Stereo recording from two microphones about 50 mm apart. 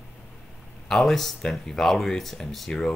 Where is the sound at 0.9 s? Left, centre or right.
Centre.